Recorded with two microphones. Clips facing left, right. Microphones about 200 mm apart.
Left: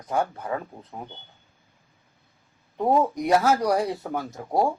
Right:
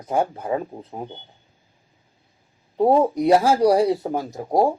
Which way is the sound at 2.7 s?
30° right (ahead or behind).